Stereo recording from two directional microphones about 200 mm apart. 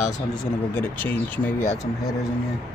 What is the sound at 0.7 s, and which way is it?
Speech, 10° left (ahead or behind).